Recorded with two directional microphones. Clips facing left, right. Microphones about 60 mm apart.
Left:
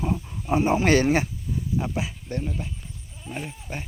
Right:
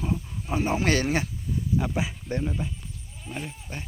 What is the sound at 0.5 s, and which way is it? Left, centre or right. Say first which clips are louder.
Speech: left 5 dB; left.